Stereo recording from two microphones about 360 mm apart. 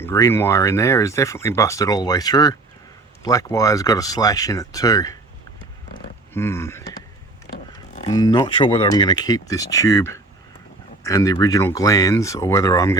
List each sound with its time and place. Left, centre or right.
0.0 s speech: centre
6.3 s speech: centre
7.9 s speech: centre